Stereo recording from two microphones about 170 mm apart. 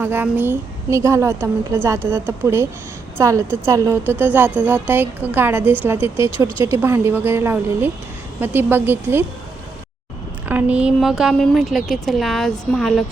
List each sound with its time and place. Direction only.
0.0 s a woman's voice: 15° right (ahead or behind)
10.5 s speech: 10° right (ahead or behind)